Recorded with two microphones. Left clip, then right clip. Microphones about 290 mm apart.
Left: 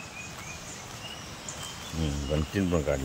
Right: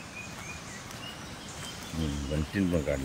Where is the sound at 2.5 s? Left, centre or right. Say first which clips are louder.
Left 1 dB; centre.